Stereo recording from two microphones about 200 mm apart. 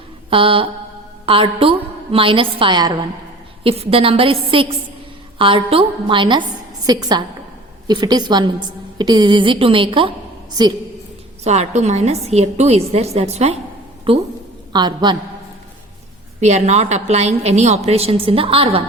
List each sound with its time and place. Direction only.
0.3 s a woman's voice: 25° right (ahead or behind)
11.4 s a woman's voice: 35° right (ahead or behind)
16.4 s a woman's voice: 35° right (ahead or behind)